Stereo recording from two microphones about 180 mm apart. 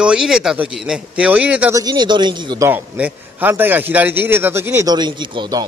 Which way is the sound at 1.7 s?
20° right (ahead or behind).